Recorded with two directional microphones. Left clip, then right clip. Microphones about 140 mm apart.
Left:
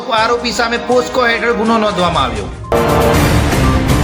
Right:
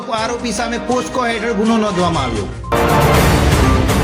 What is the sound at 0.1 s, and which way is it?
A man's voice, 40° right (ahead or behind).